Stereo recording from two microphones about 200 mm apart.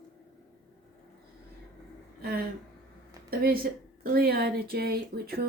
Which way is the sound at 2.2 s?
50° right (ahead or behind).